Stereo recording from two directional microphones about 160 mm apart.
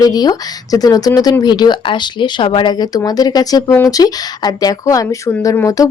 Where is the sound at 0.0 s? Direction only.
25° left (ahead or behind).